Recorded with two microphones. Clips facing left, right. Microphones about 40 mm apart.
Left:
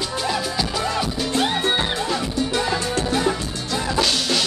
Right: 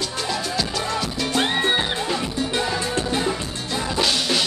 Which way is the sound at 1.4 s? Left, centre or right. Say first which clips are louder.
Even; right.